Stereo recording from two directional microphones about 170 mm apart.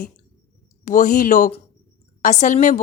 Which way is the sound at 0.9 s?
50° left (ahead or behind).